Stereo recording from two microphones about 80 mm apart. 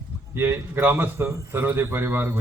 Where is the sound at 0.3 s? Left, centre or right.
Right.